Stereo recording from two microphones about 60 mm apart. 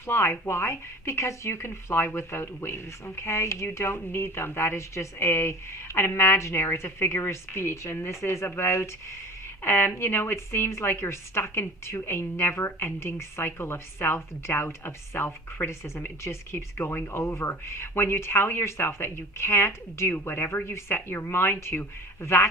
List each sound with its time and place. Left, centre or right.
0.0 s a woman's voice: left